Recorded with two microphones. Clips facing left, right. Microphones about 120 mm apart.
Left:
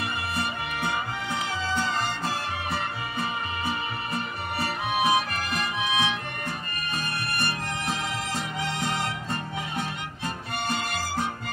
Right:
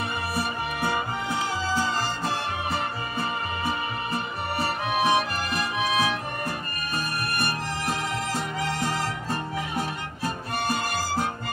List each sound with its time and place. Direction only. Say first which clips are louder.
5.0 s music: right 1 dB; centre (ahead or behind)